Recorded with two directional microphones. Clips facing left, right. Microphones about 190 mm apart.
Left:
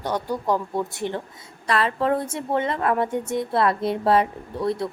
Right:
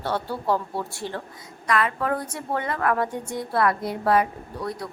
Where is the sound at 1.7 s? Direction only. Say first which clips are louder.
Left 2 dB; 30° left (ahead or behind).